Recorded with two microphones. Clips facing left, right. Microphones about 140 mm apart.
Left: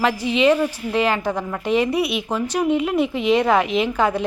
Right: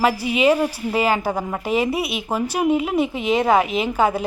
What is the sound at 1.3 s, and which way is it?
Speech, 25° right (ahead or behind).